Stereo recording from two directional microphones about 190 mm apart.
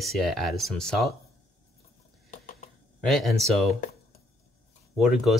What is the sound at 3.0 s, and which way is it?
Speech, centre (ahead or behind).